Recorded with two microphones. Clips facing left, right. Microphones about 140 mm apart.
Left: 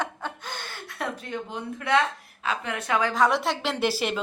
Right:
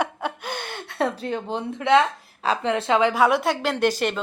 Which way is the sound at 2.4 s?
30° right (ahead or behind).